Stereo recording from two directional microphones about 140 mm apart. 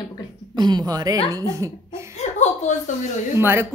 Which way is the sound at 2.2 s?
55° left (ahead or behind).